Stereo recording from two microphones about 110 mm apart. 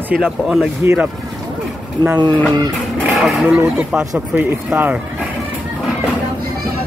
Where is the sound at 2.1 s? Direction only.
45° right (ahead or behind).